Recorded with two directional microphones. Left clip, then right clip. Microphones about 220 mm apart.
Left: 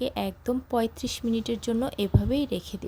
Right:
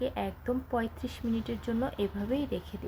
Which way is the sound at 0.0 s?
50° left (ahead or behind).